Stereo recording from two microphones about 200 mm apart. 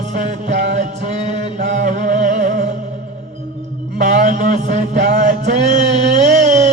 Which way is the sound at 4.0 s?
35° right (ahead or behind).